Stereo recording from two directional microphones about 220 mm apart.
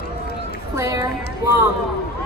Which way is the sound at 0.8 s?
15° right (ahead or behind).